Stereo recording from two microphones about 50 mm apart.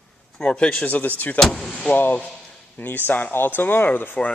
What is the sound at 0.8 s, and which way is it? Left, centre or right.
Speech, left.